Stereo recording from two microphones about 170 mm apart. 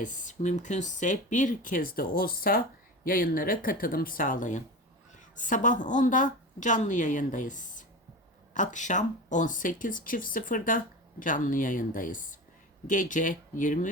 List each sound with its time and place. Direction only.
0.0 s speech: 45° left (ahead or behind)